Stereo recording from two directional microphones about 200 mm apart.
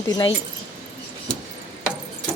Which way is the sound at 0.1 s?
25° left (ahead or behind).